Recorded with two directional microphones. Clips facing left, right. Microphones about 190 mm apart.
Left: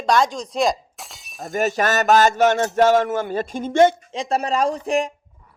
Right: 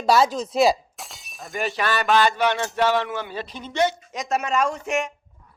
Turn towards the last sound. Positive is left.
turn(degrees=35)  # may be behind; listen again after turning